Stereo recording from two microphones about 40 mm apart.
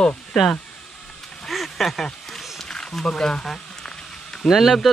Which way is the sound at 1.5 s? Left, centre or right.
Centre.